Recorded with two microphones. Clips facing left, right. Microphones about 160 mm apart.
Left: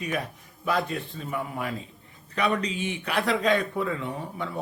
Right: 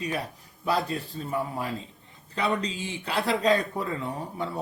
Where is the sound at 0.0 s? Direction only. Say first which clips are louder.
Left 1 dB; 30° right (ahead or behind).